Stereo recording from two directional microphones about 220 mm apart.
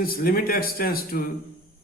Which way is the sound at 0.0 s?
40° left (ahead or behind).